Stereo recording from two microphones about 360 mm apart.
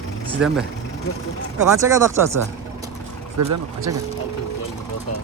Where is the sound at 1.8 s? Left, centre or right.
Centre.